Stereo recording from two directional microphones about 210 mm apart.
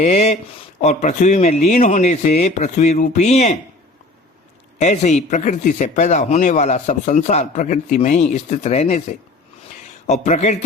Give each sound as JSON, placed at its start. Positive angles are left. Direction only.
{"t": 0.0, "sound": "speech", "side_deg": 30}
{"t": 4.8, "sound": "speech", "side_deg": 35}